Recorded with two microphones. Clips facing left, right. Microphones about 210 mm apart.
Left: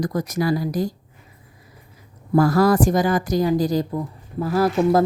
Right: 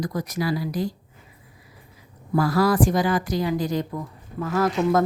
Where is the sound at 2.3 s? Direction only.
45° left (ahead or behind).